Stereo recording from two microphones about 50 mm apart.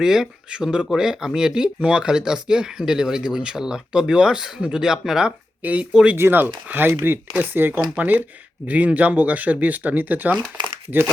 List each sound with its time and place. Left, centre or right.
0.0 s speech: centre
5.6 s speech: right
6.1 s speech: right